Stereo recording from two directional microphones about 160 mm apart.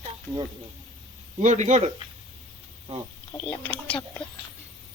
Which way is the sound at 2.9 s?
40° right (ahead or behind).